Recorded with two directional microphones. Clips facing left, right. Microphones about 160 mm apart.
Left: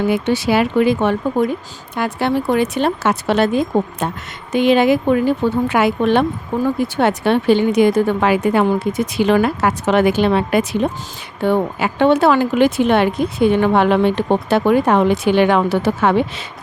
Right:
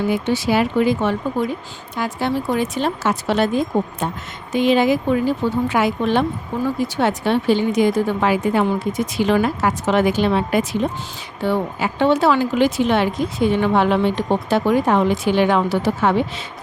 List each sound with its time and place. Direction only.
0.1 s speech: 70° left (ahead or behind)
1.4 s a woman's voice: 50° left (ahead or behind)
2.0 s speech: 65° left (ahead or behind)
11.4 s speech: 55° left (ahead or behind)